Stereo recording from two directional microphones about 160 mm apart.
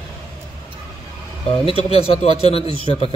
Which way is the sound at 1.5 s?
35° left (ahead or behind).